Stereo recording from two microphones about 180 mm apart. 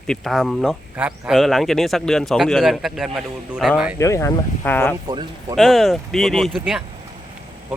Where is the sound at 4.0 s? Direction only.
15° left (ahead or behind).